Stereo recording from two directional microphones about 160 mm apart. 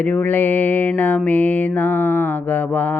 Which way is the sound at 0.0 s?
10° left (ahead or behind).